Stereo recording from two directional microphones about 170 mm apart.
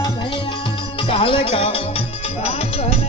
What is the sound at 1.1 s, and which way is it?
Music, 30° left (ahead or behind).